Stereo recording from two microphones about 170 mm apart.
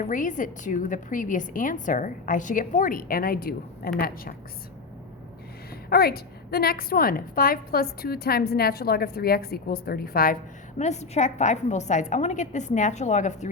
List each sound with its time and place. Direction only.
0.0 s a woman's voice: 50° left (ahead or behind)
5.9 s a woman's voice: 65° left (ahead or behind)
10.8 s a woman's voice: 40° left (ahead or behind)